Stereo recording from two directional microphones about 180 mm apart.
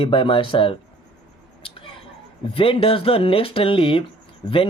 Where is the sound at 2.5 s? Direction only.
30° left (ahead or behind).